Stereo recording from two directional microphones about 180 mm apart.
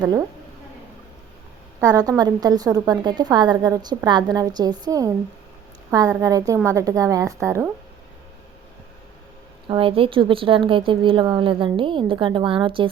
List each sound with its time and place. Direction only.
0.0 s a woman's voice: 20° right (ahead or behind)
1.8 s a woman's voice: 20° right (ahead or behind)
9.6 s a woman's voice: 30° right (ahead or behind)